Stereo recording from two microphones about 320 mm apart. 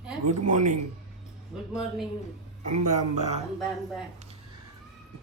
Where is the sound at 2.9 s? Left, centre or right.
Right.